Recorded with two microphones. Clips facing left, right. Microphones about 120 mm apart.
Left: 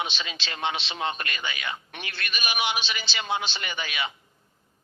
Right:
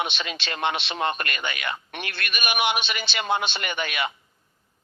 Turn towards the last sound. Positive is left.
turn(degrees=-60)  # may be behind; listen again after turning